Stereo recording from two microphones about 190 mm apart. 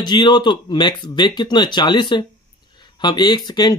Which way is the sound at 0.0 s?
25° left (ahead or behind).